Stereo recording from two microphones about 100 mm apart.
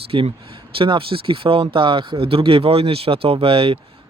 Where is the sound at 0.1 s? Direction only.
70° right (ahead or behind).